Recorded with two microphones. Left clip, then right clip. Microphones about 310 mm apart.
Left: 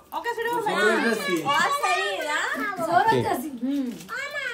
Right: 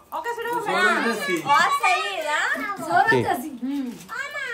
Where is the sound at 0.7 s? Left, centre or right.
Centre.